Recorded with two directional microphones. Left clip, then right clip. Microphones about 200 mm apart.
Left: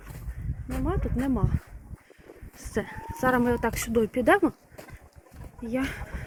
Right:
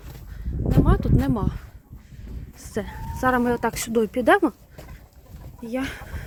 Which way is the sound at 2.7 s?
5° right (ahead or behind).